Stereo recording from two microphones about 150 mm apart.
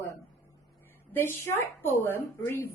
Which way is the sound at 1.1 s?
15° left (ahead or behind).